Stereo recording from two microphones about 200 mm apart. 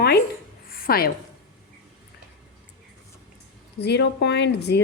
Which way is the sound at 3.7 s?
55° left (ahead or behind).